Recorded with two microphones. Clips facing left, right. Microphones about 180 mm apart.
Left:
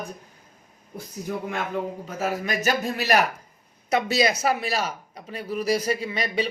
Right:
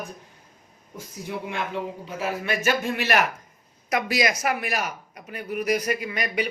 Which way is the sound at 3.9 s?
25° left (ahead or behind).